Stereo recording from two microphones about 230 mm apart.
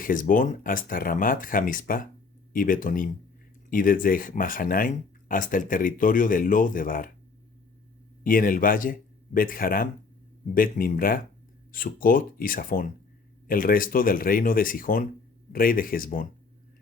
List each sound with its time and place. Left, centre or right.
0.0 s speech: left
8.2 s speech: left